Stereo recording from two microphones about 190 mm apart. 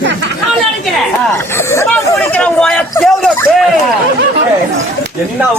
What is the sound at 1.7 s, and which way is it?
Speech, 10° left (ahead or behind).